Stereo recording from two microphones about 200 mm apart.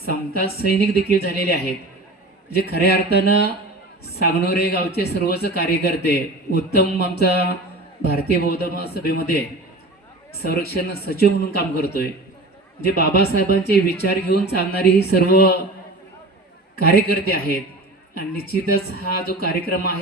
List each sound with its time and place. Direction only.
0.1 s a man's voice: 50° left (ahead or behind)
2.6 s a man's voice: 50° left (ahead or behind)
10.4 s a man's voice: 50° left (ahead or behind)
17.2 s a man's voice: 50° left (ahead or behind)